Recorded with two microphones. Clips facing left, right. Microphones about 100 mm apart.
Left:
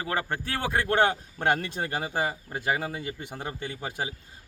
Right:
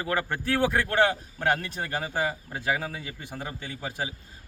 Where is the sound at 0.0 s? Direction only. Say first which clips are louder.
Right 1 dB; 25° left (ahead or behind).